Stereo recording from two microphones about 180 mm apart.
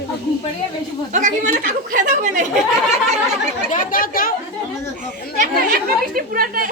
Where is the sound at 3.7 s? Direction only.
50° left (ahead or behind).